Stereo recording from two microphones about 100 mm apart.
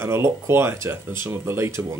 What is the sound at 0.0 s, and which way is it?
Speech, 25° right (ahead or behind).